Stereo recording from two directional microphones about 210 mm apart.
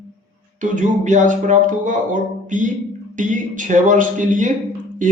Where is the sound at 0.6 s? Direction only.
35° right (ahead or behind).